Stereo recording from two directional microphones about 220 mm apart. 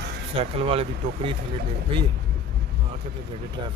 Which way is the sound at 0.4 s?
25° right (ahead or behind).